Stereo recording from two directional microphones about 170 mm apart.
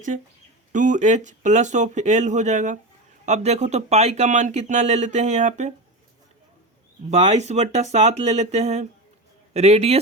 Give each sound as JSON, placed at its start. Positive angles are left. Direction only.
{"t": 0.7, "sound": "speech", "side_deg": -45}
{"t": 7.1, "sound": "speech", "side_deg": -40}